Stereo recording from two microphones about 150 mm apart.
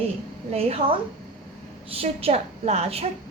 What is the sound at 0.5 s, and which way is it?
A woman's voice, 40° right (ahead or behind).